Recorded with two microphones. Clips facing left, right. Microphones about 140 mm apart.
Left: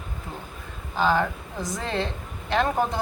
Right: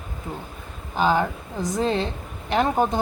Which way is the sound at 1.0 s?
15° right (ahead or behind).